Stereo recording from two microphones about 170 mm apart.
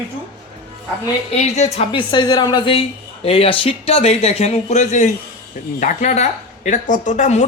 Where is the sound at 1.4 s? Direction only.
40° left (ahead or behind).